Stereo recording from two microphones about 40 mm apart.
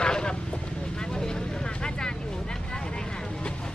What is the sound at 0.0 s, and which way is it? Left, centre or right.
Vehicle, centre.